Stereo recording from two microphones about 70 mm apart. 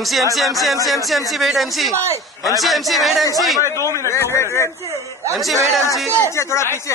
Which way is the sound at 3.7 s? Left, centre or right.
Left.